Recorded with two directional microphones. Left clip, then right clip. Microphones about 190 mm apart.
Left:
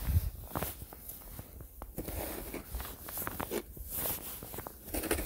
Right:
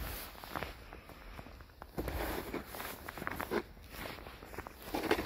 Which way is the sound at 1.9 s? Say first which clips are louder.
Right 3 dB; 20° left (ahead or behind).